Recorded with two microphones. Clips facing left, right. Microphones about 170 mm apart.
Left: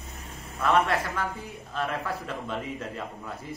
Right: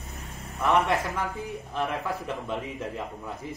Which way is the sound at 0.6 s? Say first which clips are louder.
Even; 20° right (ahead or behind).